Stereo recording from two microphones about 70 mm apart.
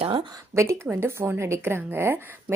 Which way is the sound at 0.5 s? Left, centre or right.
Right.